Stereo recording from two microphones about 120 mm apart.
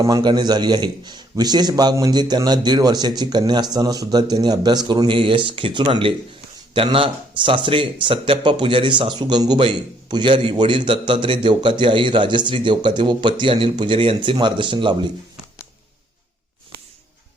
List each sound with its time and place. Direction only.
0.1 s a man's voice: 35° right (ahead or behind)